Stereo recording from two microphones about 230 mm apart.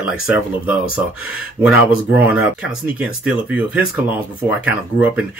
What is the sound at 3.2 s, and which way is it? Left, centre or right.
Speech, centre.